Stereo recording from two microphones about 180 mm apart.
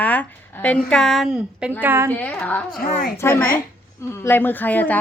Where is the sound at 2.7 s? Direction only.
55° left (ahead or behind).